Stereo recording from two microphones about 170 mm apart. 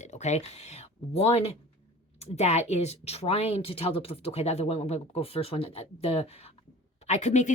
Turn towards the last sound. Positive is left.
turn(degrees=45)  # may be behind; listen again after turning